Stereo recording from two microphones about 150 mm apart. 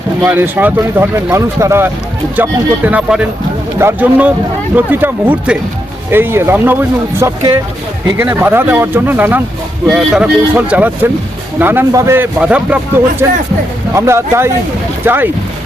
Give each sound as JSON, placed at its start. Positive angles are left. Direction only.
{"t": 0.2, "sound": "speech", "side_deg": -10}